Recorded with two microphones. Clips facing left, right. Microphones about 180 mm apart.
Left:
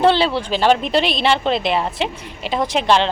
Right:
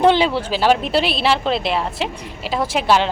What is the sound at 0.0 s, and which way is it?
A woman's voice, 15° right (ahead or behind).